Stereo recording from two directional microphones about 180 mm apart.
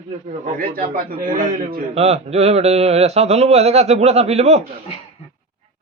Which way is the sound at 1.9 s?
35° right (ahead or behind).